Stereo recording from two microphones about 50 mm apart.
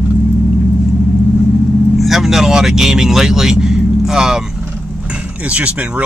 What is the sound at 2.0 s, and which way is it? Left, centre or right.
Vehicle, centre.